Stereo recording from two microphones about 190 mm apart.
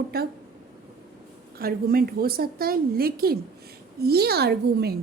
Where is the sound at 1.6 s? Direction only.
50° right (ahead or behind).